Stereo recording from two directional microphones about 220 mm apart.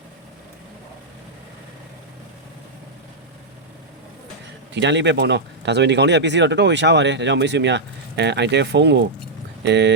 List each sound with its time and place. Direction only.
4.7 s speech: 55° right (ahead or behind)